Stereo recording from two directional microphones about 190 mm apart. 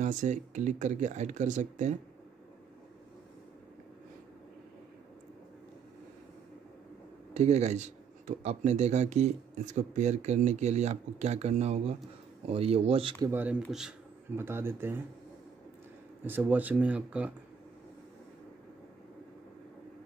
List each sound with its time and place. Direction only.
0.0 s speech: 40° right (ahead or behind)
7.3 s speech: 35° right (ahead or behind)
13.2 s speech: 10° right (ahead or behind)
16.3 s speech: 10° right (ahead or behind)